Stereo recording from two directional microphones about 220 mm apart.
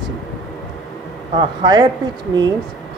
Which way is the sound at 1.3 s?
20° right (ahead or behind).